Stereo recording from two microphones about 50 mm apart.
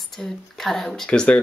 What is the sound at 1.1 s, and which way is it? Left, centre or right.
Speech, left.